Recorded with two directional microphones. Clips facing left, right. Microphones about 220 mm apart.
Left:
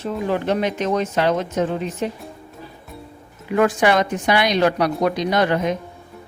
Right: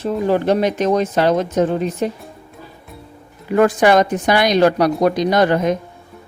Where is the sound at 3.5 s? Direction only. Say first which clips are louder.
Right 4 dB; 40° right (ahead or behind).